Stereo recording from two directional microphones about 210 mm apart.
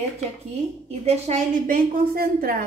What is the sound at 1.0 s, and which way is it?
A woman's voice, 35° right (ahead or behind).